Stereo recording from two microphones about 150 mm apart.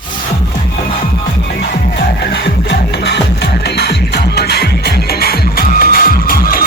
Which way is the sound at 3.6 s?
90° left.